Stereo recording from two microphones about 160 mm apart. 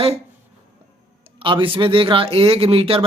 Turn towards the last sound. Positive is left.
turn(degrees=-35)  # may be behind; listen again after turning